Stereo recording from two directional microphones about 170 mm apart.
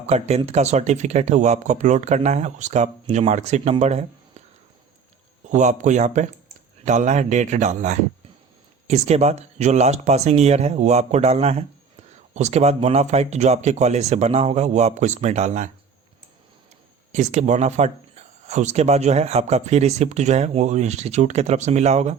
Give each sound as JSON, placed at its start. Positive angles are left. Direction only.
{"t": 0.1, "sound": "speech", "side_deg": -40}
{"t": 5.5, "sound": "speech", "side_deg": -45}
{"t": 17.1, "sound": "speech", "side_deg": -40}